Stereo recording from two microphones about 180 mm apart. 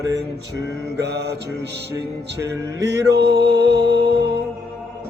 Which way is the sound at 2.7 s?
70° right (ahead or behind).